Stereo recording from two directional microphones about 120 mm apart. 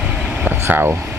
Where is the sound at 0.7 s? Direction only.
15° right (ahead or behind).